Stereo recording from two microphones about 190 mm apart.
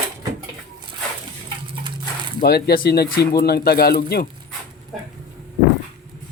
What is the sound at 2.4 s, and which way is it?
Speech, 55° left (ahead or behind).